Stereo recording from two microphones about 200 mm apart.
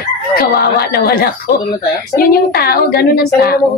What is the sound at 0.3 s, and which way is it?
A woman's voice, 50° left (ahead or behind).